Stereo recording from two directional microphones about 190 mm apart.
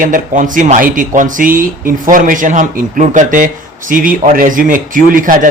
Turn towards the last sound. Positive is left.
turn(degrees=-45)  # may be behind; listen again after turning